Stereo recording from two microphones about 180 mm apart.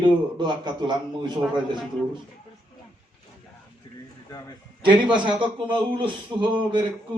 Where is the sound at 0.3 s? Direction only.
25° right (ahead or behind).